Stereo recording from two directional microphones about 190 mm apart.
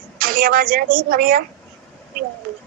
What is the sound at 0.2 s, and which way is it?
A woman's voice, 50° right (ahead or behind).